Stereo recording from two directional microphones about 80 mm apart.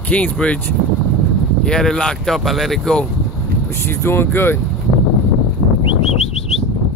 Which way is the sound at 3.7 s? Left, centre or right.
Left.